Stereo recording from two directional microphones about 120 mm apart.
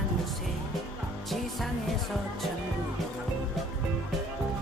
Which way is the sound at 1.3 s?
Centre (ahead or behind).